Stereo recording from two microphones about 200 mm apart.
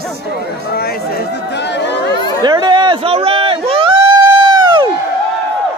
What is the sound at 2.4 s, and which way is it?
Speech, 20° right (ahead or behind).